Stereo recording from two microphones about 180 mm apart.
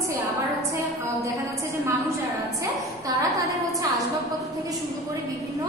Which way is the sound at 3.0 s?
20° right (ahead or behind).